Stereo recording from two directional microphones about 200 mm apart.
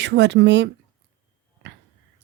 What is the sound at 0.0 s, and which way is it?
Speech, 60° right (ahead or behind).